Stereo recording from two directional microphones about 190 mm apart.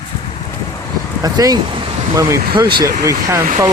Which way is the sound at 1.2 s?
20° right (ahead or behind).